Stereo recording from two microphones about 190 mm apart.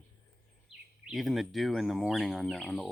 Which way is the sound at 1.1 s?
Centre (ahead or behind).